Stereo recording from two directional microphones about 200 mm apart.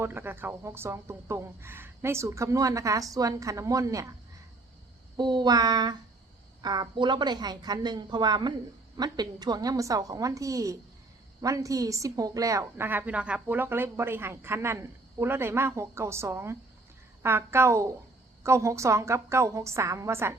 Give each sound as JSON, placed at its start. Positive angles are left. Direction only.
{"t": 0.0, "sound": "a woman's voice", "side_deg": -10}
{"t": 5.1, "sound": "a woman's voice", "side_deg": -20}